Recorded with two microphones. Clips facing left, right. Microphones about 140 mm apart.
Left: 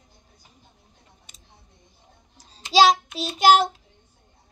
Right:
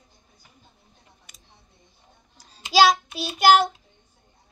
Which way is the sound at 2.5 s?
30° left (ahead or behind).